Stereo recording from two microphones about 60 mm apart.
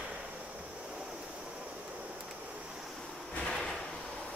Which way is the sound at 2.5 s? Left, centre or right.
Centre.